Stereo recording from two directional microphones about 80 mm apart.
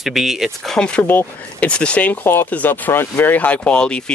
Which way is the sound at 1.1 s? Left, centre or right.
Left.